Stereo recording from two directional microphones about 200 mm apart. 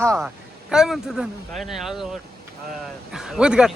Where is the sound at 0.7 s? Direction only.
Centre (ahead or behind).